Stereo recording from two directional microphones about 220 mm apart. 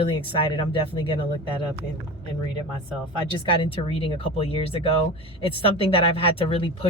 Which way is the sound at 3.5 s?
25° left (ahead or behind).